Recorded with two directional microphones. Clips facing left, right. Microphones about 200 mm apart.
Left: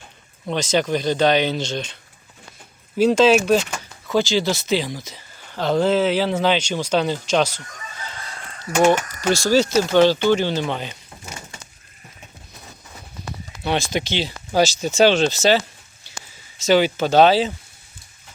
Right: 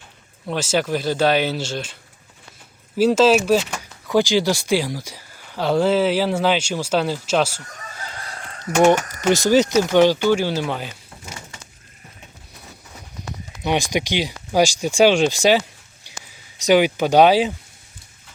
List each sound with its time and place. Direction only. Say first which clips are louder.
0.4 s speech: left 1 dB; 5° right (ahead or behind)
3.0 s speech: even; 5° right (ahead or behind)
9.2 s speech: right 2 dB; 20° right (ahead or behind)
13.2 s clip-clop: even; 15° right (ahead or behind)
13.6 s speech: right 1 dB; 15° right (ahead or behind)
16.1 s a sound: left 1 dB; 15° right (ahead or behind)
16.6 s speech: right 1 dB; 15° right (ahead or behind)